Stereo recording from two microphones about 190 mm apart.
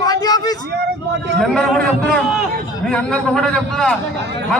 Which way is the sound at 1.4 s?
5° left (ahead or behind).